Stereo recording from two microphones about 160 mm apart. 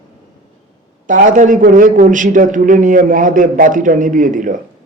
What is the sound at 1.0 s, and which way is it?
A man's voice, 55° right (ahead or behind).